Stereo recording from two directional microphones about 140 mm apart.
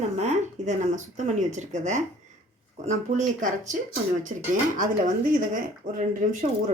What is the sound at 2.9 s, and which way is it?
Speech, 60° right (ahead or behind).